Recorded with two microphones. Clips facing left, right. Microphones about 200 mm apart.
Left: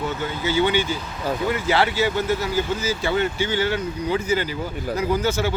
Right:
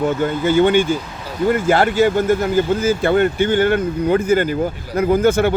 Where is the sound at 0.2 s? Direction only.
50° right (ahead or behind).